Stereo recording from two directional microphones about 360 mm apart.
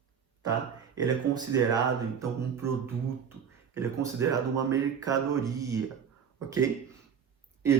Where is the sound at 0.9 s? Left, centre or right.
Centre.